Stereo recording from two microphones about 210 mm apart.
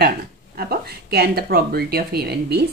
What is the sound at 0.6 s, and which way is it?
A woman's voice, 45° right (ahead or behind).